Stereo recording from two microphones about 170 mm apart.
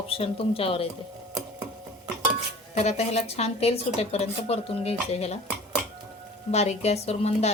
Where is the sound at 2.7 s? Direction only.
40° left (ahead or behind).